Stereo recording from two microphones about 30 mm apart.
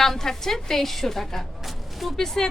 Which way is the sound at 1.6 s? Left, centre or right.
Centre.